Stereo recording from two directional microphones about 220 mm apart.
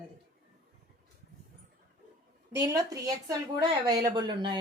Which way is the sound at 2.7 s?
15° right (ahead or behind).